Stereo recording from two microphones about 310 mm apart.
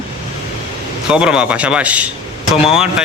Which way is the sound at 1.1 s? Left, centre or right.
Centre.